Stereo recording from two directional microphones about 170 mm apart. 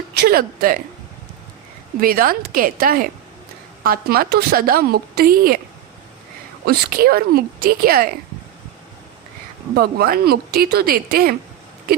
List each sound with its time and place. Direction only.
0.1 s a woman's voice: 65° right (ahead or behind)
2.0 s a woman's voice: 55° right (ahead or behind)
6.7 s a woman's voice: 60° right (ahead or behind)
9.7 s a woman's voice: 65° right (ahead or behind)